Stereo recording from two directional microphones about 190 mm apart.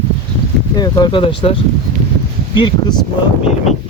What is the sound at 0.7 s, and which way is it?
Speech, 20° left (ahead or behind).